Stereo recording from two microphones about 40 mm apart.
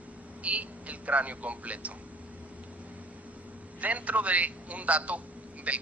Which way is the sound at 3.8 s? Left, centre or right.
Right.